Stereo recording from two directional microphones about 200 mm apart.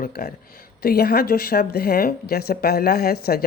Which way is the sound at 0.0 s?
50° left (ahead or behind).